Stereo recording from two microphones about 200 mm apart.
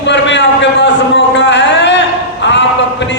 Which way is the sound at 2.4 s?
65° left (ahead or behind).